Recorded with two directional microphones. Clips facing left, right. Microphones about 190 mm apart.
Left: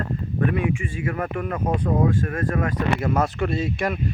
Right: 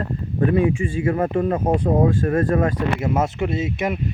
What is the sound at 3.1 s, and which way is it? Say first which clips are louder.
Speech: right 1 dB; 20° right (ahead or behind).